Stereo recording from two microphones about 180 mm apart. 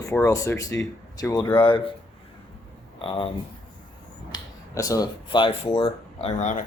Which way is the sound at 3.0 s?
30° left (ahead or behind).